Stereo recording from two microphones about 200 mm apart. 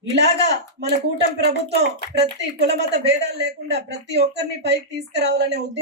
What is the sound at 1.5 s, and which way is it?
Speech, 55° right (ahead or behind).